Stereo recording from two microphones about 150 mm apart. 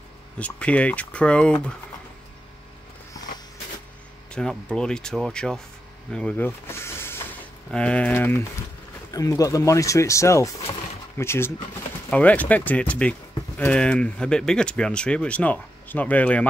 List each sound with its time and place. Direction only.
0.4 s speech: 10° left (ahead or behind)
4.3 s speech: 5° left (ahead or behind)
10.7 s a sound: 15° left (ahead or behind)
12.1 s speech: 10° left (ahead or behind)